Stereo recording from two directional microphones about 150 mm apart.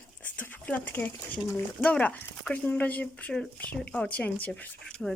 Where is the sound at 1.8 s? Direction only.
10° left (ahead or behind).